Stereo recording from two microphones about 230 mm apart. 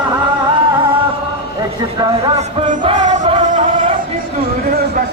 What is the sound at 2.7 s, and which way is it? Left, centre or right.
Music, right.